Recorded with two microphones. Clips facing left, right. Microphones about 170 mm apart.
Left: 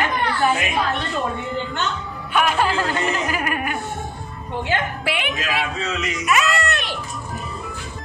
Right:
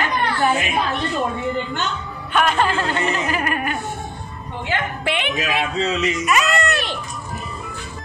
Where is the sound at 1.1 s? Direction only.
Centre (ahead or behind).